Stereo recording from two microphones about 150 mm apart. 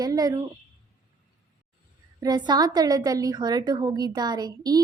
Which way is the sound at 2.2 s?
30° right (ahead or behind).